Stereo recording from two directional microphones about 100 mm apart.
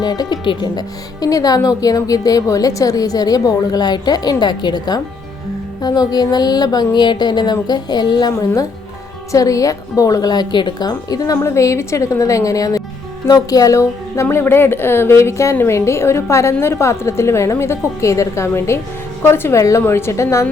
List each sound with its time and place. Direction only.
0.0 s speech: 40° left (ahead or behind)
5.8 s a sound: 40° left (ahead or behind)
9.3 s a woman's voice: 35° left (ahead or behind)